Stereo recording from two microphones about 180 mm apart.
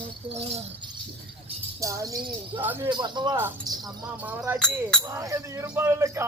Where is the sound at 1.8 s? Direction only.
15° right (ahead or behind).